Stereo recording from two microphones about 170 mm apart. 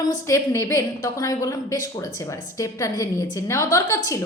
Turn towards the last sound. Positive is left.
turn(degrees=15)  # may be behind; listen again after turning